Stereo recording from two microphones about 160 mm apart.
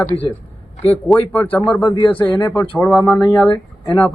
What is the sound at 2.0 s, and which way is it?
Speech, 25° left (ahead or behind).